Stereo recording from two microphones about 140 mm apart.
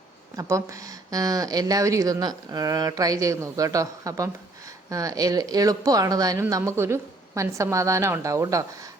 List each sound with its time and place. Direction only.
0.3 s speech: 20° right (ahead or behind)